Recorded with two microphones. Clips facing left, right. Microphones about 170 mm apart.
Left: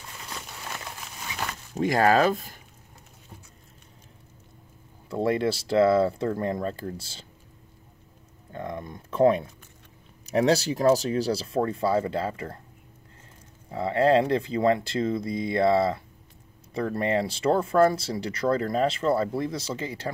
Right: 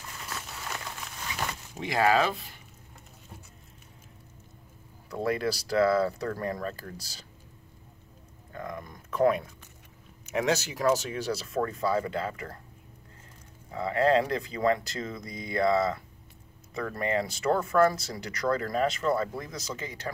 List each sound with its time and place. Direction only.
1.8 s speech: 45° left (ahead or behind)
5.1 s speech: 25° left (ahead or behind)
8.5 s speech: 25° left (ahead or behind)
13.7 s speech: 30° left (ahead or behind)